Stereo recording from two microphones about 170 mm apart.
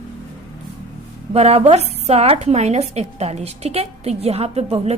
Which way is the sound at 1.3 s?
40° right (ahead or behind).